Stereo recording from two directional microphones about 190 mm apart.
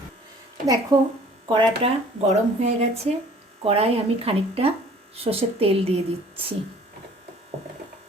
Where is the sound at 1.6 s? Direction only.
30° right (ahead or behind).